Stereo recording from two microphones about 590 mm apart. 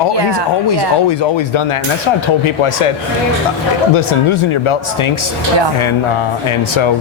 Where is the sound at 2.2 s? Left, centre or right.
Left.